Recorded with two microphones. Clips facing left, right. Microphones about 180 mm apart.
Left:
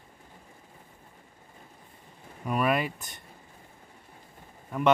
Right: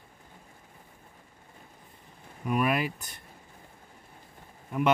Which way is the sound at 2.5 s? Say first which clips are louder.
Left 1 dB; 5° right (ahead or behind).